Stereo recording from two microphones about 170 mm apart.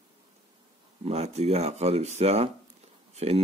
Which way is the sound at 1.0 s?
40° right (ahead or behind).